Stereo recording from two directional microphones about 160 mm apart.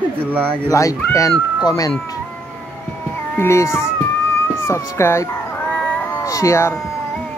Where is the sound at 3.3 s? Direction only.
15° left (ahead or behind).